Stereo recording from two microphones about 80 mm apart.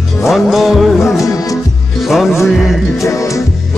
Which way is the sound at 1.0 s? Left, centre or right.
Left.